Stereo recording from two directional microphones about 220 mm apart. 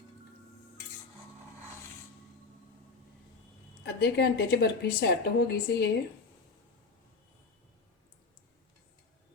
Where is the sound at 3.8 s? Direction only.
50° left (ahead or behind).